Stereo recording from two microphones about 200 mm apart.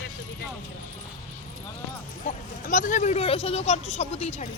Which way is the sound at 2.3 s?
40° left (ahead or behind).